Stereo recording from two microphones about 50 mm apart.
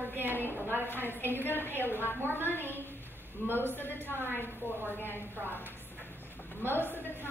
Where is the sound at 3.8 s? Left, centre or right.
Left.